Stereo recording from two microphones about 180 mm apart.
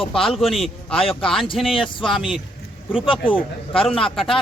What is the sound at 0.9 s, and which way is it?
Speech, 30° left (ahead or behind).